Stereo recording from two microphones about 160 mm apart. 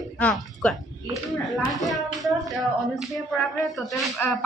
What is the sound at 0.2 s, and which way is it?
Speech, 5° left (ahead or behind).